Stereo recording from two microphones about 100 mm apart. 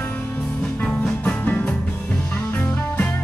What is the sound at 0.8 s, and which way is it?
Music, 10° left (ahead or behind).